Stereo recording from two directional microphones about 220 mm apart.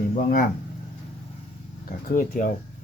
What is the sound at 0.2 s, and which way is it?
Speech, 35° left (ahead or behind).